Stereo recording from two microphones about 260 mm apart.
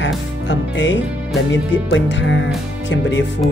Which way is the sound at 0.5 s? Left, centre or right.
Left.